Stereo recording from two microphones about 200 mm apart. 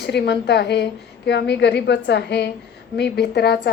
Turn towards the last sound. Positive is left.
turn(degrees=55)  # may be behind; listen again after turning